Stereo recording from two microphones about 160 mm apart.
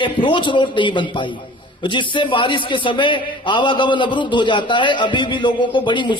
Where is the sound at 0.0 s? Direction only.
30° left (ahead or behind).